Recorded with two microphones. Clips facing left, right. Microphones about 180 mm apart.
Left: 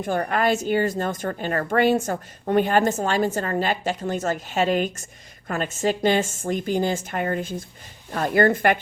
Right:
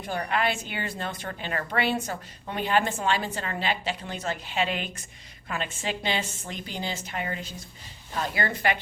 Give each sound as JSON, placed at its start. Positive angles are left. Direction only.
{"t": 0.0, "sound": "a woman's voice", "side_deg": 50}